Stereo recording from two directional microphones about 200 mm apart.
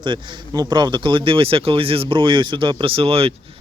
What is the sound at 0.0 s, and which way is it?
Speech, 25° right (ahead or behind).